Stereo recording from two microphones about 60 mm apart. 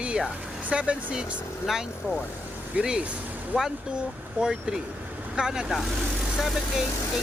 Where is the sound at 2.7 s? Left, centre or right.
Right.